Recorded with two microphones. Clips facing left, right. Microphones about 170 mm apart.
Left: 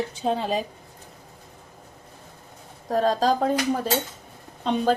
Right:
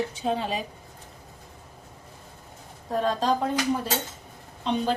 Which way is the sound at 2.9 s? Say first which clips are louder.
Left 3 dB; 40° left (ahead or behind).